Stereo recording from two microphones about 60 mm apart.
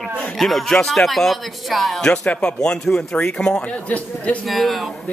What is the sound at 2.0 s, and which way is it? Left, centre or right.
Speech, centre.